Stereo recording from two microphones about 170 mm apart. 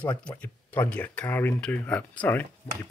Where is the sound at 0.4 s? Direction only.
10° left (ahead or behind).